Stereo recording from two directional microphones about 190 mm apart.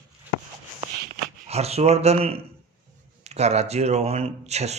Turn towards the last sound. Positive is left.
turn(degrees=-35)  # may be behind; listen again after turning